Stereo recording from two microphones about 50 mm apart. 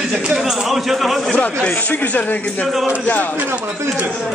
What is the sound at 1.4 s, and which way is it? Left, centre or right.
Speech, left.